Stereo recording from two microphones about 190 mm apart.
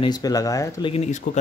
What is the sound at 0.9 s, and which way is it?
Speech, 35° left (ahead or behind).